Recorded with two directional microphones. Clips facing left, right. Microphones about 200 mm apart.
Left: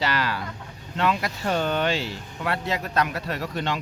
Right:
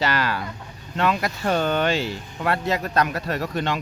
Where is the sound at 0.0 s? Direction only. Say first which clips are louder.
Right 2 dB; 50° right (ahead or behind).